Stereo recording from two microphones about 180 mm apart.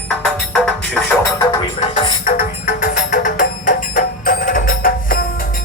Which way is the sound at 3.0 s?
40° left (ahead or behind).